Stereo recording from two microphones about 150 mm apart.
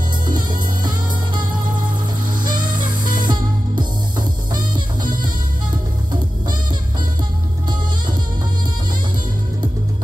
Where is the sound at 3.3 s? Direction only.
30° right (ahead or behind).